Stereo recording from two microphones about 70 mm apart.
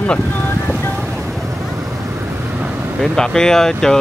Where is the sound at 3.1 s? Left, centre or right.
Centre.